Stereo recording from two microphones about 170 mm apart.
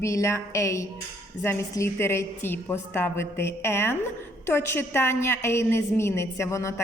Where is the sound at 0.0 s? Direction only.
15° left (ahead or behind).